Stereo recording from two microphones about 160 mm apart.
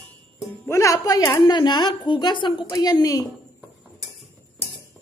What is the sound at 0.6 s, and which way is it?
Speech, 20° left (ahead or behind).